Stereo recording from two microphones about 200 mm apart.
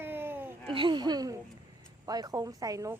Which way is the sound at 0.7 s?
25° right (ahead or behind).